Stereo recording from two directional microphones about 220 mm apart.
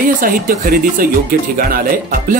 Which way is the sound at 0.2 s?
40° right (ahead or behind).